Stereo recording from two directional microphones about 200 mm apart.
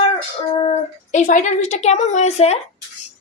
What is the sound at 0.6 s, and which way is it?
A woman's voice, 35° left (ahead or behind).